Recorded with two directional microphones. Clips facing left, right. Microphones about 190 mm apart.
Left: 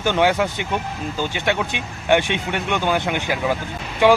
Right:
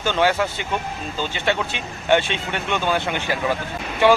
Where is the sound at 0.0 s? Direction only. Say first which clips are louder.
Left 2 dB; 15° left (ahead or behind).